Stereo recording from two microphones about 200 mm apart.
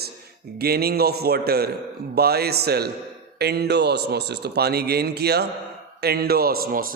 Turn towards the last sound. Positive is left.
turn(degrees=-45)  # may be behind; listen again after turning